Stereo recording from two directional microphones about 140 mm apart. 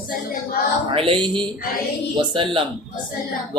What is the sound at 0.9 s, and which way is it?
Mantra, 40° right (ahead or behind).